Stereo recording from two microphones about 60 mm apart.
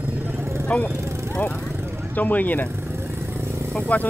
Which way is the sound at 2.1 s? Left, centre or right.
Left.